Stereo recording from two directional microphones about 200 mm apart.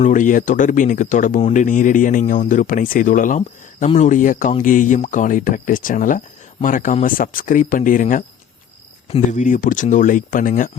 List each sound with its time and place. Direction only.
0.0 s speech: 40° left (ahead or behind)